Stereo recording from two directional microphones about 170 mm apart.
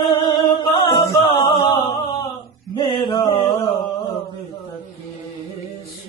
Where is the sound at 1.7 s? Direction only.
35° left (ahead or behind).